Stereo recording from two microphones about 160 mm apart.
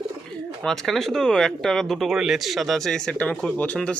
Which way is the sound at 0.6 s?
Centre (ahead or behind).